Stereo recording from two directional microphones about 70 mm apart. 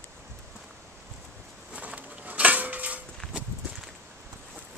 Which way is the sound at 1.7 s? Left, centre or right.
Centre.